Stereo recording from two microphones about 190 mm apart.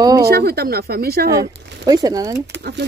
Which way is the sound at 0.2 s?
55° right (ahead or behind).